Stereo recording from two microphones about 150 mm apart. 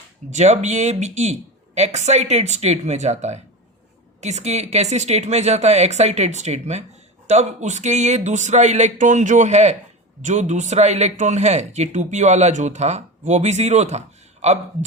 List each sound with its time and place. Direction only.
0.3 s speech: 50° right (ahead or behind)